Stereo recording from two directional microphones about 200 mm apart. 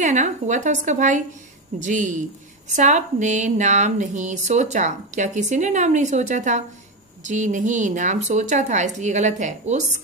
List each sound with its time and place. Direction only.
0.0 s speech: 35° right (ahead or behind)